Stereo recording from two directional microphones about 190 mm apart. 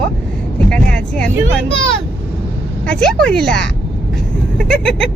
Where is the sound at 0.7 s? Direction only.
5° left (ahead or behind).